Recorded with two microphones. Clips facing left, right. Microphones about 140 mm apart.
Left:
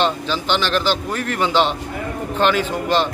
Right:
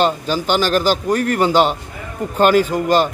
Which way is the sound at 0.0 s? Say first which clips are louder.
Right 3 dB; 45° right (ahead or behind).